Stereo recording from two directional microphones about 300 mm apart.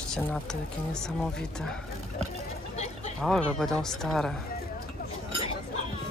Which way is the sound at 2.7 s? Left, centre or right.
Left.